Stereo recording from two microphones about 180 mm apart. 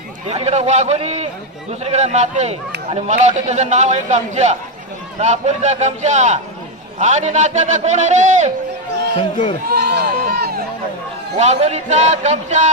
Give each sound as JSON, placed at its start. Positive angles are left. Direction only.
{"t": 0.3, "sound": "a man's voice", "side_deg": -35}
{"t": 9.8, "sound": "a sound", "side_deg": -55}
{"t": 11.3, "sound": "a man's voice", "side_deg": -40}